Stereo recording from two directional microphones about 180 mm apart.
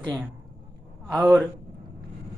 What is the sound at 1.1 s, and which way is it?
Speech, 5° right (ahead or behind).